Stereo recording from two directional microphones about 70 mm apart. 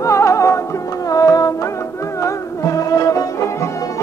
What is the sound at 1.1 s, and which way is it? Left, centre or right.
Music, left.